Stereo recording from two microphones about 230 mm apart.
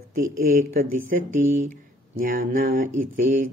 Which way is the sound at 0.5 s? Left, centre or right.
Right.